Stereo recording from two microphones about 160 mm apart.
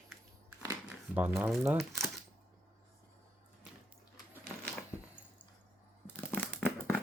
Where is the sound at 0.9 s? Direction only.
10° right (ahead or behind).